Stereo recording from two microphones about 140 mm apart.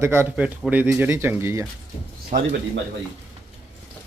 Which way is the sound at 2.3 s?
65° right (ahead or behind).